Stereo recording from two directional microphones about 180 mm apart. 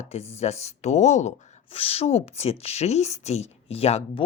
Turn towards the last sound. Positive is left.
turn(degrees=35)  # may be behind; listen again after turning